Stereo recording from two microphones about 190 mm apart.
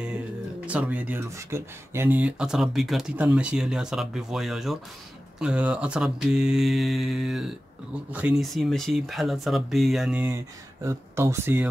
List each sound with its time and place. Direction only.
0.7 s speech: 10° right (ahead or behind)